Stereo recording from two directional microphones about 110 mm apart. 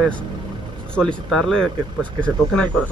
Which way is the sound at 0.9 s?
5° left (ahead or behind).